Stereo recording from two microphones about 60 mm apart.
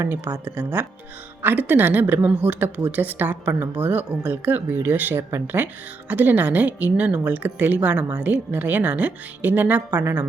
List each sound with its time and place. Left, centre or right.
0.0 s a woman's voice: right